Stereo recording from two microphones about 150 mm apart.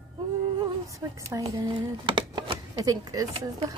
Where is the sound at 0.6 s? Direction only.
25° right (ahead or behind).